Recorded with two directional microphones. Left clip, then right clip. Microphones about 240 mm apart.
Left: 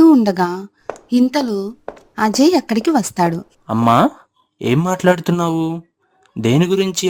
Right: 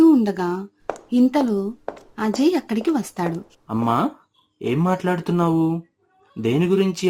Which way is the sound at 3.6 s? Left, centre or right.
Left.